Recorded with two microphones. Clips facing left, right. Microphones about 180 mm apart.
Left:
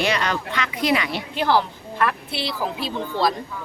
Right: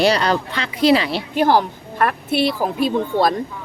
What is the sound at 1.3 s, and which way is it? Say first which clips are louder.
A woman's voice: right 4 dB; 45° right (ahead or behind).